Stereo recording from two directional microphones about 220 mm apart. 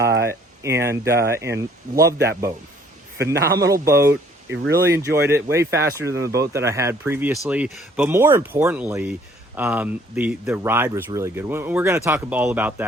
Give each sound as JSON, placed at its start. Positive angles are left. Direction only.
{"t": 0.2, "sound": "speech", "side_deg": -10}
{"t": 4.5, "sound": "speech", "side_deg": -50}
{"t": 5.3, "sound": "speech", "side_deg": -10}